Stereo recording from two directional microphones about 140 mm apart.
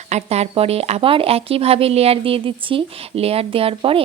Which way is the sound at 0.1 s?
50° right (ahead or behind).